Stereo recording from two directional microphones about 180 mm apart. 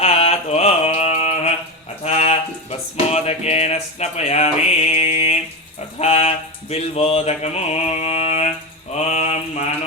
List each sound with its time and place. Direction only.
0.0 s mantra: 35° left (ahead or behind)
2.0 s music: 35° left (ahead or behind)
6.0 s mantra: 35° left (ahead or behind)